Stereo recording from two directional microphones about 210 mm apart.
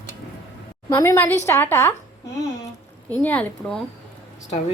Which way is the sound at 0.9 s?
15° left (ahead or behind).